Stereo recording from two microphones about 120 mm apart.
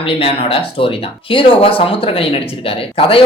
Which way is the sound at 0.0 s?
50° left (ahead or behind).